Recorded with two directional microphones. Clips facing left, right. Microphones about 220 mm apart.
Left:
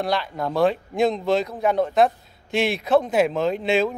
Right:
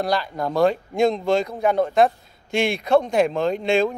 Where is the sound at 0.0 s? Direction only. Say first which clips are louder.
Right 1 dB; centre (ahead or behind).